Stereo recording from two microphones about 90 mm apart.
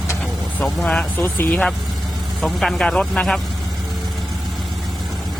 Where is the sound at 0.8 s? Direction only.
10° left (ahead or behind).